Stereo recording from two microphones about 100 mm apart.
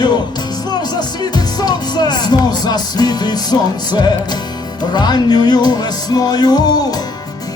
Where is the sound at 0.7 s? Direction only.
45° left (ahead or behind).